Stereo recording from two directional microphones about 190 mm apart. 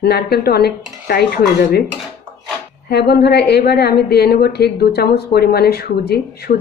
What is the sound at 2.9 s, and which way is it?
A woman's voice, 60° left (ahead or behind).